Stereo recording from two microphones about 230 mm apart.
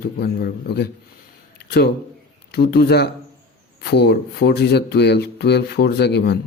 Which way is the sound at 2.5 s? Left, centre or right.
Left.